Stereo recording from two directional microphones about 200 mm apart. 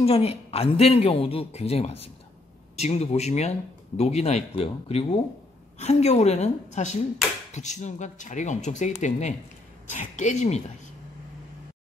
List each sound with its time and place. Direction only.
0.0 s speech: 30° left (ahead or behind)